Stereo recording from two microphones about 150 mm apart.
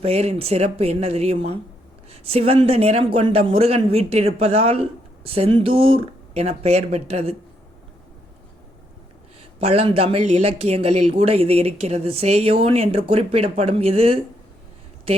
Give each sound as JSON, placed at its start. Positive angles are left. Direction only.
{"t": 0.0, "sound": "speech", "side_deg": -45}
{"t": 9.6, "sound": "speech", "side_deg": -45}